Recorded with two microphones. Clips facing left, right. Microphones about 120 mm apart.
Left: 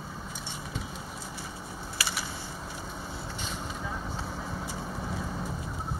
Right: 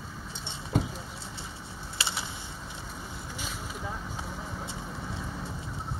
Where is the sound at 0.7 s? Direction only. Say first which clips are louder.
Right 12 dB; 50° right (ahead or behind).